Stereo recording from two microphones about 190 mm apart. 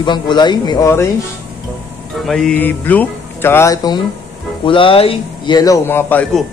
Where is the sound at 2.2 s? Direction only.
5° left (ahead or behind).